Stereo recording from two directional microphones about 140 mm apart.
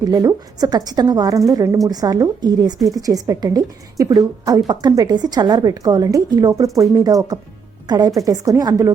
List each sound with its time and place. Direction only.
0.0 s a woman's voice: 25° right (ahead or behind)